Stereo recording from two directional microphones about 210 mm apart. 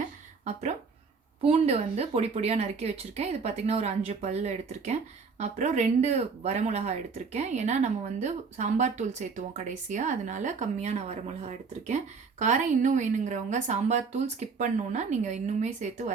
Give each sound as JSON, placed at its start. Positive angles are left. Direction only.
{"t": 0.5, "sound": "speech", "side_deg": -35}